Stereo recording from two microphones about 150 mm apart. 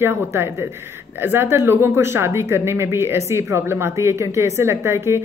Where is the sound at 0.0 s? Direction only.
15° right (ahead or behind).